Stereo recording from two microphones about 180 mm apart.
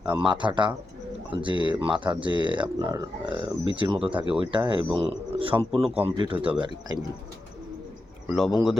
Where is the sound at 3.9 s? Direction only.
5° right (ahead or behind).